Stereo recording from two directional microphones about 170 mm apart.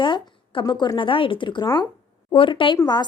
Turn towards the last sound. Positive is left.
turn(degrees=25)  # may be behind; listen again after turning